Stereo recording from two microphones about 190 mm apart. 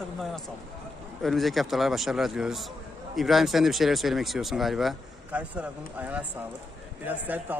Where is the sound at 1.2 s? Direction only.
Centre (ahead or behind).